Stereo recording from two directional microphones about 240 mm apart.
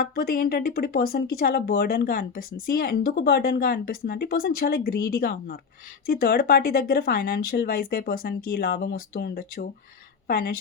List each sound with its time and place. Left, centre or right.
0.0 s speech: left